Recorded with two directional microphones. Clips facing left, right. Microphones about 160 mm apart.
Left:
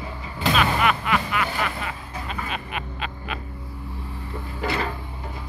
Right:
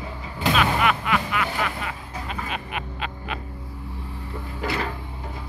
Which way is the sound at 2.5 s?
15° right (ahead or behind).